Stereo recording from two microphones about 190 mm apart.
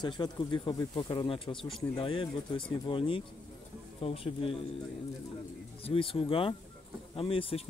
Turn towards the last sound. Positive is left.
turn(degrees=30)  # may be behind; listen again after turning